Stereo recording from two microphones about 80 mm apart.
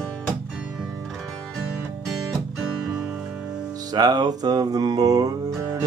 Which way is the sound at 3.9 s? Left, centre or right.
Right.